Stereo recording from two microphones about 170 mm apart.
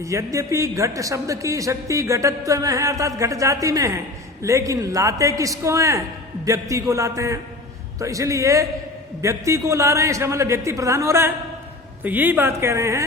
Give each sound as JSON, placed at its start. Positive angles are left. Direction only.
{"t": 0.0, "sound": "a man's voice", "side_deg": -20}